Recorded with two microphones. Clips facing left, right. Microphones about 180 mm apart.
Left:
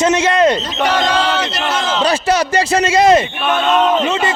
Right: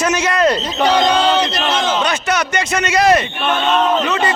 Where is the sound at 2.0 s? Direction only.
30° left (ahead or behind).